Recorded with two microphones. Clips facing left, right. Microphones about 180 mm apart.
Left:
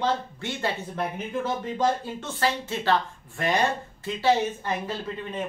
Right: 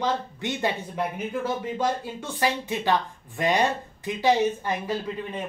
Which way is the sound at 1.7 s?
15° right (ahead or behind).